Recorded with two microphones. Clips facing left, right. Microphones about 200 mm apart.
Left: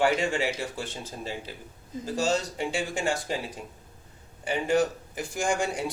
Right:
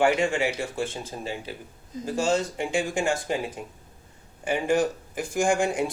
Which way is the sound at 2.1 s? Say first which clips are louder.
Right 2 dB; 50° right (ahead or behind).